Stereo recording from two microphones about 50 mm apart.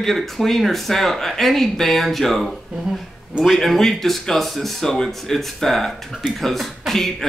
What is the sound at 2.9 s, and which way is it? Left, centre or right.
Speech, centre.